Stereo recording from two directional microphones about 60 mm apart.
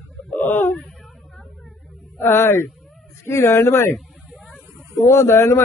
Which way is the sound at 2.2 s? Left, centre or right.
Left.